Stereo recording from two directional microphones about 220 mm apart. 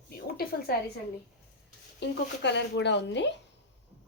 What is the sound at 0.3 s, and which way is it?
Speech, 45° left (ahead or behind).